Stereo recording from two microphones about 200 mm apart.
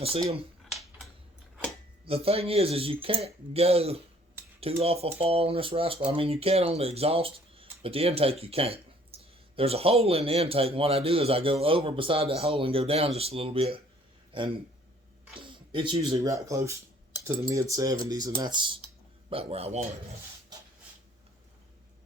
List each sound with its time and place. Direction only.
2.0 s a man's voice: 30° right (ahead or behind)
15.4 s a man's voice: 25° right (ahead or behind)